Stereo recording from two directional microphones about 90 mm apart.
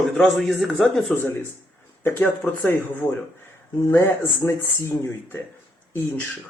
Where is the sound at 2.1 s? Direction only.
25° left (ahead or behind).